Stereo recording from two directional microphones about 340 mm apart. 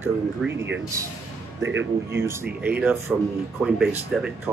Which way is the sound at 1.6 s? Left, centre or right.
Right.